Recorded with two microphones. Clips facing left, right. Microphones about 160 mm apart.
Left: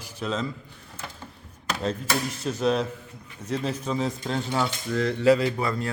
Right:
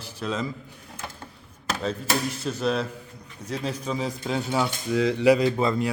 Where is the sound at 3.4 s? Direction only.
10° right (ahead or behind).